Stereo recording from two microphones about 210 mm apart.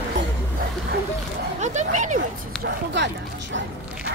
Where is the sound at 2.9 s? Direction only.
55° right (ahead or behind).